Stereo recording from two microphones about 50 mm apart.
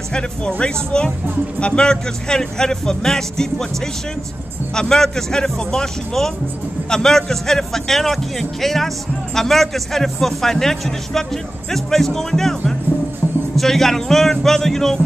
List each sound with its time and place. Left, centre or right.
0.1 s speech: centre
4.7 s speech: centre